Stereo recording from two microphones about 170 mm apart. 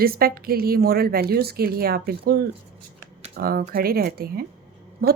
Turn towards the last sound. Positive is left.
turn(degrees=-65)  # may be behind; listen again after turning